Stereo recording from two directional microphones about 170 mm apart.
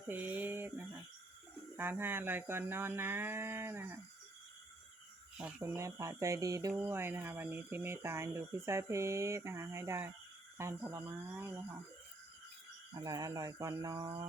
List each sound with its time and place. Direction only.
0.1 s speech: 10° right (ahead or behind)
5.4 s speech: 10° right (ahead or behind)
13.0 s cricket: 20° right (ahead or behind)